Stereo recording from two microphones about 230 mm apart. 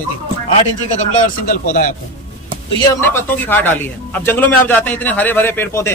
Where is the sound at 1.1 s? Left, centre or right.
Left.